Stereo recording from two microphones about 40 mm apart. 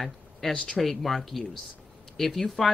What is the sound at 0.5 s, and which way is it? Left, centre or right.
Speech, left.